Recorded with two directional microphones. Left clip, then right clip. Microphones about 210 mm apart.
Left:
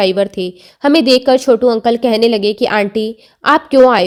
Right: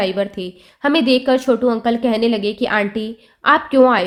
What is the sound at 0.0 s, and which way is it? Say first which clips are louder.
A woman's voice: left 6 dB; 35° left (ahead or behind).